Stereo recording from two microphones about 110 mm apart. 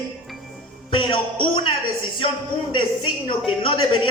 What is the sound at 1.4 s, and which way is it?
Speech, 55° left (ahead or behind).